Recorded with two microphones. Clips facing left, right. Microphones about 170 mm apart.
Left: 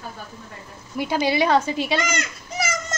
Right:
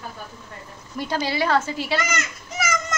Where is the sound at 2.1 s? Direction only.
35° left (ahead or behind).